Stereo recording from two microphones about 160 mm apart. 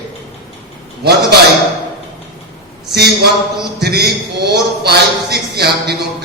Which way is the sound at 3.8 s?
90° right.